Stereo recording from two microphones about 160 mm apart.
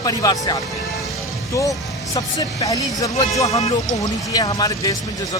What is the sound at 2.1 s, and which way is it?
Speech, 20° left (ahead or behind).